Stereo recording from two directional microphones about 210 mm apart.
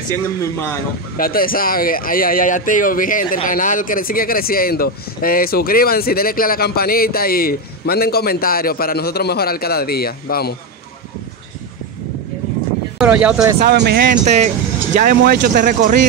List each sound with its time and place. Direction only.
0.4 s a man's voice: 10° left (ahead or behind)
1.1 s speech: 45° left (ahead or behind)
13.0 s speech: 5° right (ahead or behind)
13.7 s speech: 50° right (ahead or behind)